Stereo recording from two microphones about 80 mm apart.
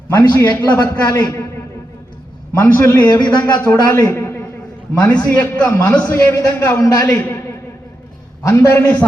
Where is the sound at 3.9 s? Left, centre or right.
Left.